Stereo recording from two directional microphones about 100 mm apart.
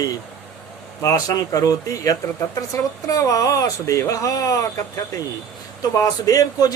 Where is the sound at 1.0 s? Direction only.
35° left (ahead or behind).